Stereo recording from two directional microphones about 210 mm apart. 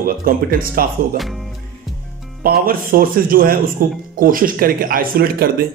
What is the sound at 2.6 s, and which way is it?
Speech, 45° right (ahead or behind).